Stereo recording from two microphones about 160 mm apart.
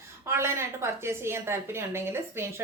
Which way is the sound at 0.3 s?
15° right (ahead or behind).